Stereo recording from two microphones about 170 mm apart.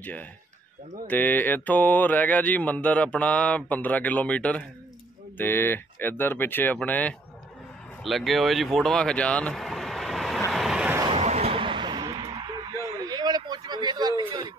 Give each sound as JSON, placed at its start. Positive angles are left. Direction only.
{"t": 1.0, "sound": "mantra", "side_deg": 10}
{"t": 8.0, "sound": "speech", "side_deg": 0}
{"t": 10.5, "sound": "vehicle", "side_deg": 0}
{"t": 11.1, "sound": "a sound", "side_deg": -40}